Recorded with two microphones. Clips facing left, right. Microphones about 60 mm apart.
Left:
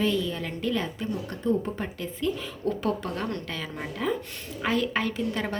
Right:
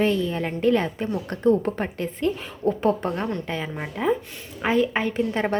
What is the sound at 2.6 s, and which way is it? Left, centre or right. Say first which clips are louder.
A woman's voice: right 7 dB; right.